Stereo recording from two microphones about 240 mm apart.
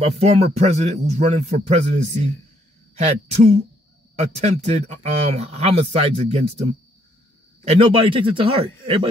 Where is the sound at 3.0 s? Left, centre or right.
Right.